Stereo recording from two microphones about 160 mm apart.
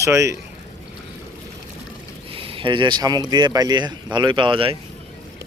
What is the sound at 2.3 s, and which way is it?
Speech, 35° right (ahead or behind).